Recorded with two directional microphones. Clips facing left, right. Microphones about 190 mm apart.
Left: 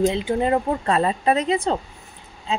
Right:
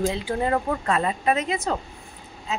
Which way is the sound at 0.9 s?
35° left (ahead or behind).